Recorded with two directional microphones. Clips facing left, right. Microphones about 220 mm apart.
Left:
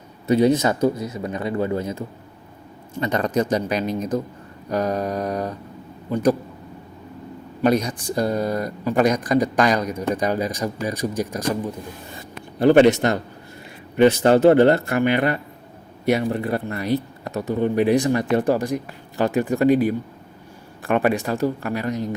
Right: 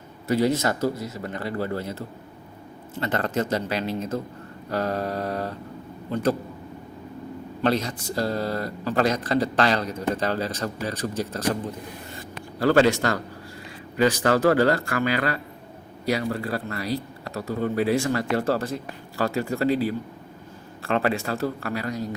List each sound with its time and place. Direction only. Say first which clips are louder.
0.3 s speech: left 5 dB; 20° left (ahead or behind)
7.6 s speech: left 5 dB; 15° left (ahead or behind)